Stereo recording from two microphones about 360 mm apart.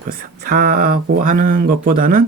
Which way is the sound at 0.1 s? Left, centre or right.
Right.